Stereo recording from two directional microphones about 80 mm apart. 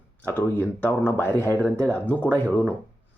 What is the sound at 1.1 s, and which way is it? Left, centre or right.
Speech, left.